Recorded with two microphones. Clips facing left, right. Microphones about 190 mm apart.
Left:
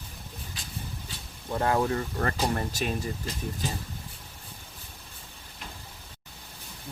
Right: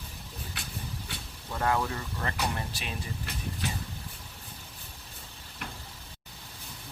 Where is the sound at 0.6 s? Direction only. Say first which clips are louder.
Right 2 dB; 65° right (ahead or behind).